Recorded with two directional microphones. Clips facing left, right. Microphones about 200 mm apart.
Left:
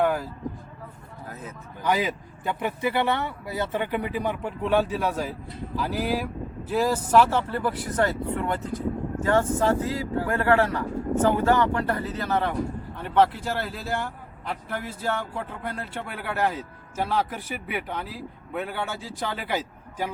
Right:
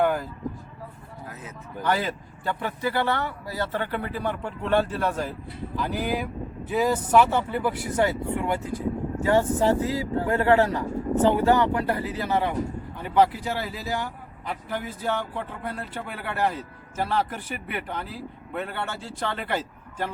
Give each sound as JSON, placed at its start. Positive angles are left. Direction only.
{"t": 0.0, "sound": "vehicle", "side_deg": 0}
{"t": 1.8, "sound": "a man's voice", "side_deg": 10}